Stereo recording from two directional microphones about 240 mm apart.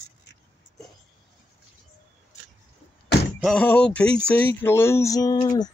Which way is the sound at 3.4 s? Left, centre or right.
Centre.